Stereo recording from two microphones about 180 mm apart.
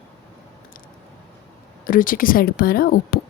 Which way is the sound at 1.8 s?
50° left (ahead or behind).